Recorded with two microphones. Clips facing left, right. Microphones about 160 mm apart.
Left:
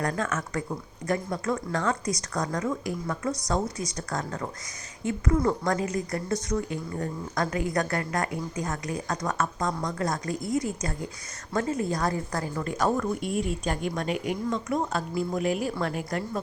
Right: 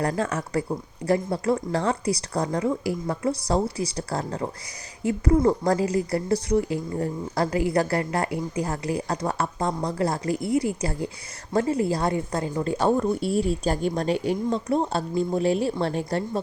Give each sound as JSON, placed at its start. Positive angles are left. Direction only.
{"t": 0.0, "sound": "a woman's voice", "side_deg": -30}